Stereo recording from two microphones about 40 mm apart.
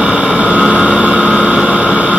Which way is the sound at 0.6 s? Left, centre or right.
Right.